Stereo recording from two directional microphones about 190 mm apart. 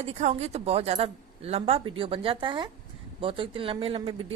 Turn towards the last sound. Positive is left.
turn(degrees=-30)  # may be behind; listen again after turning